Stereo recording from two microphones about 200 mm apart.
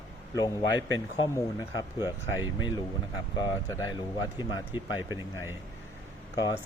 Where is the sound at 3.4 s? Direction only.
20° left (ahead or behind).